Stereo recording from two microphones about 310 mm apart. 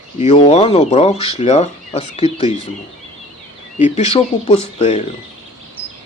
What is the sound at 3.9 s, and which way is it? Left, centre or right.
Speech, centre.